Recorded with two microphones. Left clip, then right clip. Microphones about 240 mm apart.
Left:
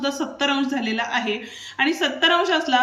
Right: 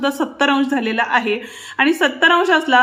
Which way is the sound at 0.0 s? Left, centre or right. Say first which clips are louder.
Right 6 dB; centre.